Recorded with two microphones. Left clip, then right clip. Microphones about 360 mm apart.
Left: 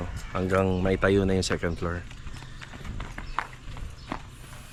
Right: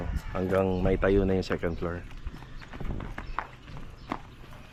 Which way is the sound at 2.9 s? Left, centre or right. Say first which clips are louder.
Left 4 dB; centre.